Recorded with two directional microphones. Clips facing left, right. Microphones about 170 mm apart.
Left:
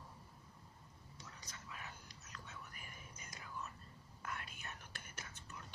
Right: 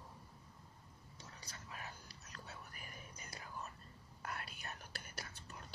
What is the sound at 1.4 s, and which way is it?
Whispering, 35° right (ahead or behind).